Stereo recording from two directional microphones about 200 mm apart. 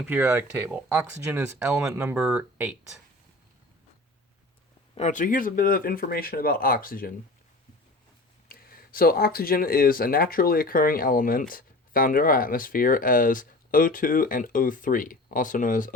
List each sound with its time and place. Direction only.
0.0 s speech: 10° right (ahead or behind)
4.9 s speech: 40° left (ahead or behind)
8.4 s speech: 45° left (ahead or behind)